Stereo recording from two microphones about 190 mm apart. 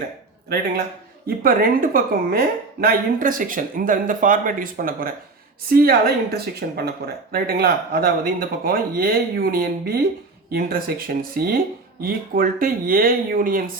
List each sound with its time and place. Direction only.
1.4 s speech: 50° right (ahead or behind)